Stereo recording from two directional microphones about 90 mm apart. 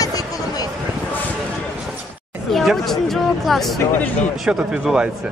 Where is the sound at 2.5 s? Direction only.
Centre (ahead or behind).